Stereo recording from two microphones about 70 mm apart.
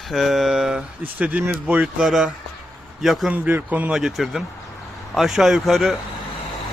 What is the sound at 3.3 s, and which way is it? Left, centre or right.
Speech, right.